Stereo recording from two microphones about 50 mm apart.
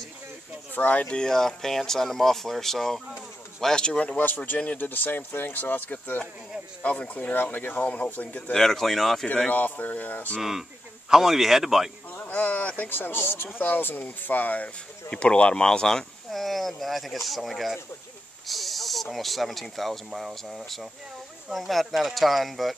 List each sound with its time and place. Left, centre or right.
0.7 s speech: left
1.2 s speech: centre
3.6 s speech: centre
4.7 s speech: left
8.5 s speech: centre
9.5 s speech: left
11.1 s speech: centre
12.3 s speech: left
12.9 s speech: left
15.0 s speech: left; by 22.8 s centre